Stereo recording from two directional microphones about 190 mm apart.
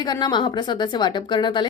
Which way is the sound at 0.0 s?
20° left (ahead or behind).